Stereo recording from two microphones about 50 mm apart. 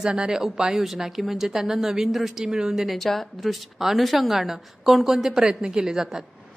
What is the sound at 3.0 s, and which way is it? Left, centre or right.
A woman's voice, centre.